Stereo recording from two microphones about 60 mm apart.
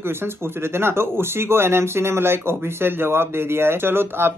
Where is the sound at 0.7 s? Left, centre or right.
Right.